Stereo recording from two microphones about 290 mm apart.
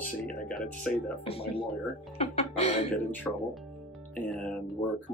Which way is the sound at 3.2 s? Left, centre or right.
Centre.